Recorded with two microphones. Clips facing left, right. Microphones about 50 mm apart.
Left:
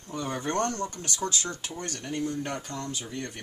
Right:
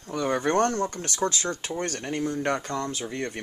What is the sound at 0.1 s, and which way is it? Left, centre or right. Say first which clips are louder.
Speech: right 6 dB; right.